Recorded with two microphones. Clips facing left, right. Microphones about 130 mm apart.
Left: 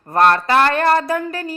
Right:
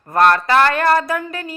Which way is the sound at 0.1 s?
30° left (ahead or behind).